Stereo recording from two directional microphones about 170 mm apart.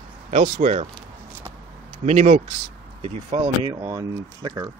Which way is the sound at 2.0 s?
40° right (ahead or behind).